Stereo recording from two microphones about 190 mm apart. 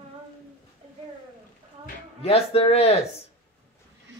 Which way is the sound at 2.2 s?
30° left (ahead or behind).